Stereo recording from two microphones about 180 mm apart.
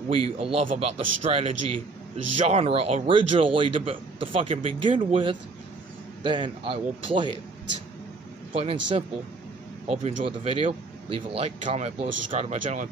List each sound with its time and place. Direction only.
0.1 s a man's voice: 30° right (ahead or behind)
8.5 s speech: 30° right (ahead or behind)